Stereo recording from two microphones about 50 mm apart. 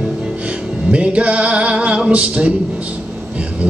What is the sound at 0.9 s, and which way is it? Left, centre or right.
Male singing, right.